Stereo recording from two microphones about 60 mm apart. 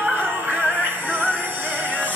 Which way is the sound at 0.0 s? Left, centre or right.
Right.